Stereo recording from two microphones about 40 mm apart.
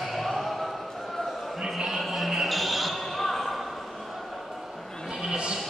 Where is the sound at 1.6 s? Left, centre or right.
Centre.